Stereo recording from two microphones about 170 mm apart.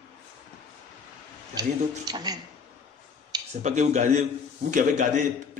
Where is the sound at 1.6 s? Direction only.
25° right (ahead or behind).